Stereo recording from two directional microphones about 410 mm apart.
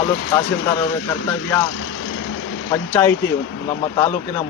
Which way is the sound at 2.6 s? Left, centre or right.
Centre.